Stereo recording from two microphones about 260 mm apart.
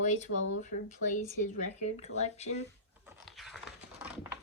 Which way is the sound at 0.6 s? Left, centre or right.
Left.